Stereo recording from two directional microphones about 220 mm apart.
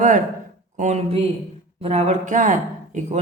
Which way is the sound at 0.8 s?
30° right (ahead or behind).